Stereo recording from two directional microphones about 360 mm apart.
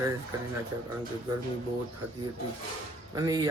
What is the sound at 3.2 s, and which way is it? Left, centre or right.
Speech, centre.